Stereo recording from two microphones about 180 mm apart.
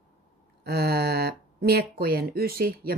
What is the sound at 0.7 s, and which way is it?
Speech, 60° right (ahead or behind).